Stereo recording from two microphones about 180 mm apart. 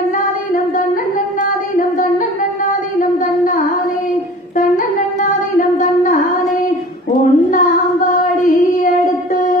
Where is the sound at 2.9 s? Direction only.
45° left (ahead or behind).